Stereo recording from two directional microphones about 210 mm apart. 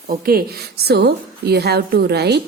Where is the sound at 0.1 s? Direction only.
45° right (ahead or behind).